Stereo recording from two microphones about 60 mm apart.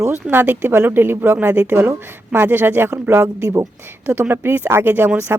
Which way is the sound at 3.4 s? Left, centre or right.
Right.